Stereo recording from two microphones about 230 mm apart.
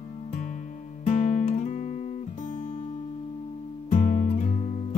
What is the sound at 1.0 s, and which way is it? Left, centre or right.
Guitar, left.